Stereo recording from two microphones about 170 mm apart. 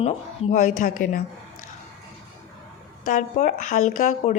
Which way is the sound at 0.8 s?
50° left (ahead or behind).